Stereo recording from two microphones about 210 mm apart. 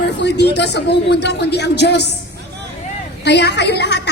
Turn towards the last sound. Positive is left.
turn(degrees=55)  # may be behind; listen again after turning